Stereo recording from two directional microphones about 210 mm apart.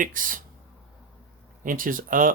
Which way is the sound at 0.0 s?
40° right (ahead or behind).